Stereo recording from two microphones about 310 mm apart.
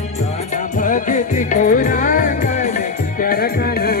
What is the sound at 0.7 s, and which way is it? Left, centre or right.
Music, left.